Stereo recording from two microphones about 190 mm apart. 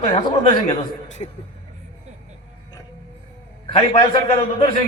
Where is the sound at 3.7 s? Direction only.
30° left (ahead or behind).